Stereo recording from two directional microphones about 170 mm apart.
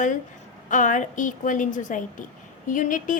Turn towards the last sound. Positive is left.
turn(degrees=50)  # may be behind; listen again after turning